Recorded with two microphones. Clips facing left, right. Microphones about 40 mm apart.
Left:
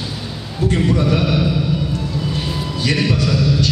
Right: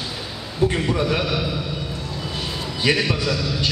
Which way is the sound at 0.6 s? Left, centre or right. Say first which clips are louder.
Left 1 dB; right.